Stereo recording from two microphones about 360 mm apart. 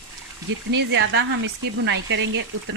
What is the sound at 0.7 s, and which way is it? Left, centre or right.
Speech, right.